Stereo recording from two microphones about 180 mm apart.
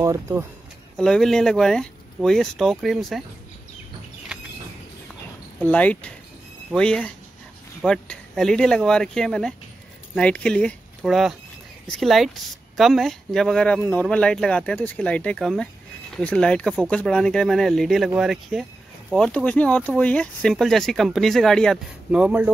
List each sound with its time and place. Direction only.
0.0 s speech: 15° right (ahead or behind)
0.9 s speech: 5° left (ahead or behind)
5.6 s speech: 10° left (ahead or behind); by 22.5 s 5° right (ahead or behind)